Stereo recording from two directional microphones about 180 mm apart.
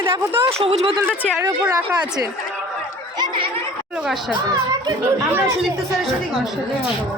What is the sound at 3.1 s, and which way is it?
Chatter, 25° right (ahead or behind).